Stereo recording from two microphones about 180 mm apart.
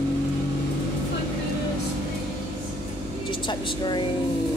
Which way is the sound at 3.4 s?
25° left (ahead or behind).